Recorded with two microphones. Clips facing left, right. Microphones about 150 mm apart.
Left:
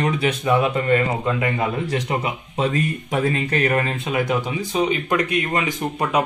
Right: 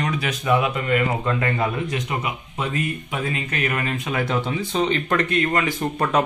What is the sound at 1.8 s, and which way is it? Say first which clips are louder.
Speech: left 3 dB; 35° left (ahead or behind).